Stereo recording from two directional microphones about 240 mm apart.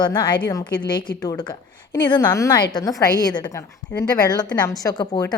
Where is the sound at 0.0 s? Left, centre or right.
Centre.